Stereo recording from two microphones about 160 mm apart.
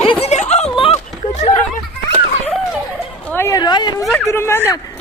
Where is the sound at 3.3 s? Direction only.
15° left (ahead or behind).